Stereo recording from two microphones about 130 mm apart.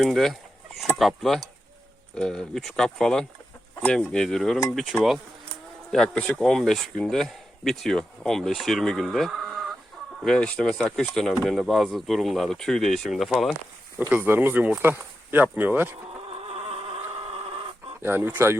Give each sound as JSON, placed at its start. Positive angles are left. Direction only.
{"t": 0.0, "sound": "speech", "side_deg": 0}
{"t": 14.1, "sound": "speech", "side_deg": -15}
{"t": 16.3, "sound": "a sound", "side_deg": -50}
{"t": 18.0, "sound": "speech", "side_deg": -15}